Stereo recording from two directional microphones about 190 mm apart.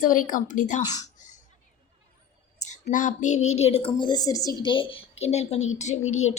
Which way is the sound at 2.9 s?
40° left (ahead or behind).